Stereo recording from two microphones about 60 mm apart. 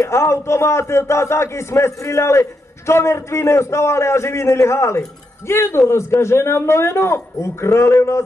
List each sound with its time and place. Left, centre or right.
0.0 s a man's voice: left